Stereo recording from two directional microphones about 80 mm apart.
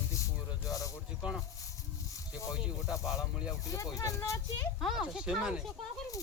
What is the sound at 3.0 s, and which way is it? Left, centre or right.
Speech, centre.